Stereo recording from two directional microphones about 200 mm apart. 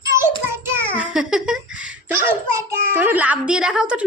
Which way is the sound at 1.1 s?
5° right (ahead or behind).